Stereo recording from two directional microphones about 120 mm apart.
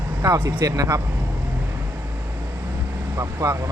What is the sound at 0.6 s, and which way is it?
Speech, 30° right (ahead or behind).